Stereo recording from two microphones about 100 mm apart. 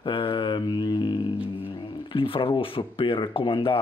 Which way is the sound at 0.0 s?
60° left (ahead or behind).